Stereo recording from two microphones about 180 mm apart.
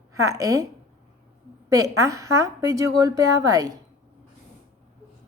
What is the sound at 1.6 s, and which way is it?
A woman's voice, 20° right (ahead or behind).